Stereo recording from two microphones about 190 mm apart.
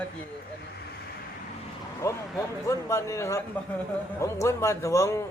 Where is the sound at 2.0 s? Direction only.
15° left (ahead or behind).